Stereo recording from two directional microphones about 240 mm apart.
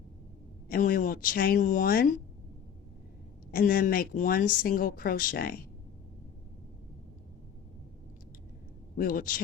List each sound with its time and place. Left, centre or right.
0.7 s speech: left
3.5 s speech: left
9.0 s speech: left